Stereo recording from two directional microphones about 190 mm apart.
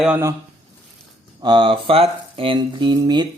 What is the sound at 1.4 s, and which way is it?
Speech, 25° right (ahead or behind).